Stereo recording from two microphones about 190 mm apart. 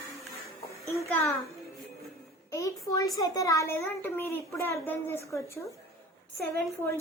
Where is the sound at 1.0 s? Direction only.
15° left (ahead or behind).